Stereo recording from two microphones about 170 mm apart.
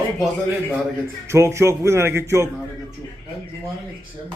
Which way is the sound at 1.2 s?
15° right (ahead or behind).